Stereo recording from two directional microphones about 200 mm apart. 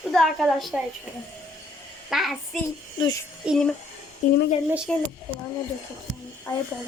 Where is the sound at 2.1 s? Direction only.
Centre (ahead or behind).